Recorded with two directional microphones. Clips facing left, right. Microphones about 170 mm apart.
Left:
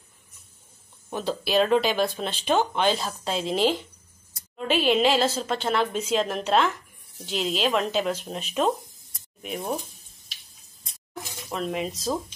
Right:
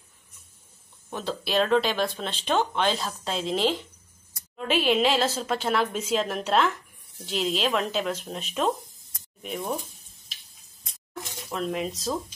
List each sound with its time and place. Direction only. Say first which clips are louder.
1.1 s speech: left 3 dB; 5° left (ahead or behind)
11.5 s speech: even; centre (ahead or behind)